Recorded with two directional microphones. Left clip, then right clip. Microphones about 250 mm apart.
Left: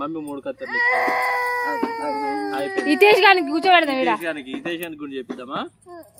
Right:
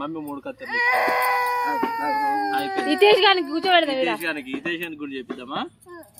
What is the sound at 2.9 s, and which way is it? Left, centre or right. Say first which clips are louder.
Speech: left 3 dB; left.